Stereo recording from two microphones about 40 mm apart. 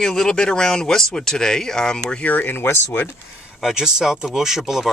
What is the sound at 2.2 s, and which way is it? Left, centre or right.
Speech, left.